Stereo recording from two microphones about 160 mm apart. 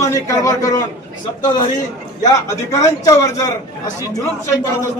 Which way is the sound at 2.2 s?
20° left (ahead or behind).